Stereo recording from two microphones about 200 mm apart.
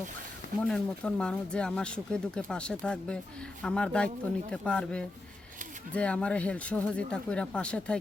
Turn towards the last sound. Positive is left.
turn(degrees=5)  # may be behind; listen again after turning